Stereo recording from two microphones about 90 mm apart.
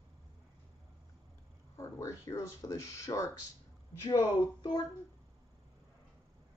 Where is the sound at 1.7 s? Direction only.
35° left (ahead or behind).